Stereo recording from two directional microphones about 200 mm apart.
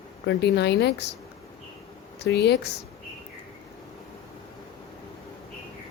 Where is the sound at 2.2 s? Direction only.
55° left (ahead or behind).